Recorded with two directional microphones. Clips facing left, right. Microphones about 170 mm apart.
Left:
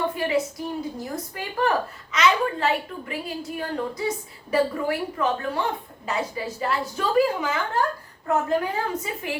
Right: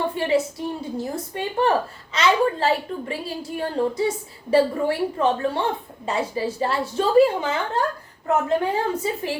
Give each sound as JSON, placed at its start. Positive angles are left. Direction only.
{"t": 0.1, "sound": "a woman's voice", "side_deg": -30}